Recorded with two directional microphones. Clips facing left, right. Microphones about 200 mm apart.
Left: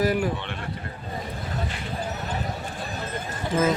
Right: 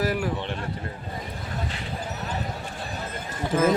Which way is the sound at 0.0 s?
Centre (ahead or behind).